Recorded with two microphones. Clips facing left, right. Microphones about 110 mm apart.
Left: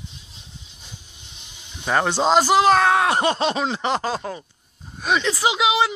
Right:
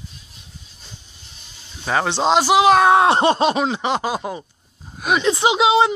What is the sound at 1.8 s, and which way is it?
Speech, centre (ahead or behind).